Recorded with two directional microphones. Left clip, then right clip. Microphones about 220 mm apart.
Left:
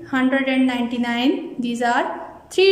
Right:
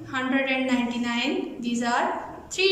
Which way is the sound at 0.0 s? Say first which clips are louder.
Left 6 dB; 30° left (ahead or behind).